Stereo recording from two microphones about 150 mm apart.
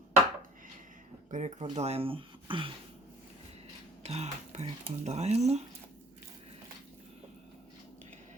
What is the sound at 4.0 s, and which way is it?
Speech, 45° right (ahead or behind).